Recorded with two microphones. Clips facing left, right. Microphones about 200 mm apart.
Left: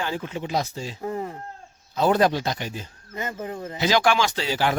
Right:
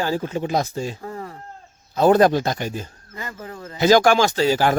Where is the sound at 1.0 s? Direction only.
20° left (ahead or behind).